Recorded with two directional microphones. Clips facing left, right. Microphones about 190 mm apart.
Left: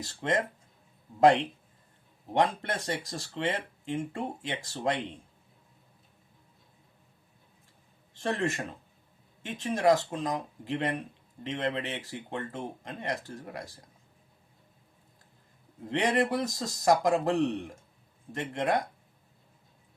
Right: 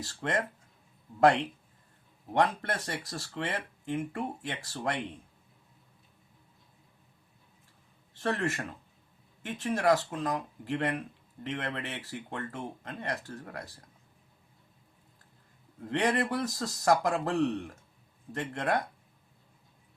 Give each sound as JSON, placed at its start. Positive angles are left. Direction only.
{"t": 0.0, "sound": "speech", "side_deg": 20}
{"t": 8.2, "sound": "speech", "side_deg": 20}
{"t": 15.9, "sound": "speech", "side_deg": 20}